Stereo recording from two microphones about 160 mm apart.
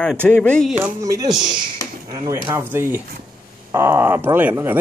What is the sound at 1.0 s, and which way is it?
Speech, 20° right (ahead or behind).